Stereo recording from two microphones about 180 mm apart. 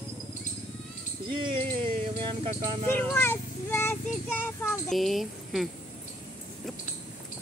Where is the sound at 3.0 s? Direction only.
10° left (ahead or behind).